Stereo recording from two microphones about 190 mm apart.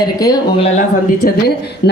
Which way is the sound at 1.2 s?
55° left (ahead or behind).